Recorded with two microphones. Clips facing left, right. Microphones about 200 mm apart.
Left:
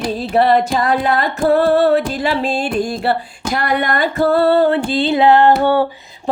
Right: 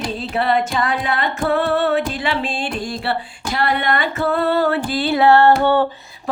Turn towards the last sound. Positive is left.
turn(degrees=10)  # may be behind; listen again after turning